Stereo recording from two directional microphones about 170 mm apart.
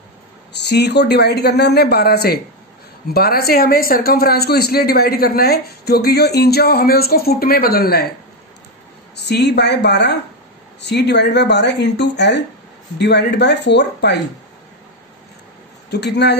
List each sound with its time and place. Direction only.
0.6 s a man's voice: 80° left; by 8.1 s 65° left (ahead or behind)
9.1 s a woman's voice: 80° left
15.9 s a woman's voice: 80° left